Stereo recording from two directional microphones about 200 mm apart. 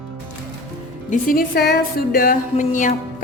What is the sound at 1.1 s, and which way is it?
Music, 45° left (ahead or behind).